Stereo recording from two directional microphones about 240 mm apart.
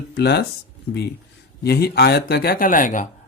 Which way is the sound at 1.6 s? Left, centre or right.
Left.